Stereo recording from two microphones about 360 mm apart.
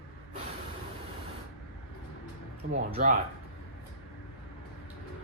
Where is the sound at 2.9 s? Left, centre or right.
Right.